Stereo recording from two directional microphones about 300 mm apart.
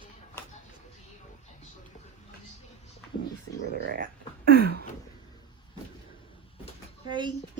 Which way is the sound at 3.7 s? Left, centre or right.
Right.